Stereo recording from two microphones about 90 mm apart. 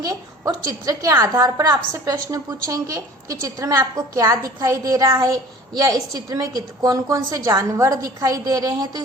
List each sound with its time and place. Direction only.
0.1 s a woman's voice: 40° right (ahead or behind)